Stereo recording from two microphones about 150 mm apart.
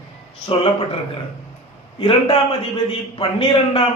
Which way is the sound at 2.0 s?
40° left (ahead or behind).